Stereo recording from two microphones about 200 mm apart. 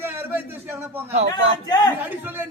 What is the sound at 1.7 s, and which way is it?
Speech, 20° left (ahead or behind).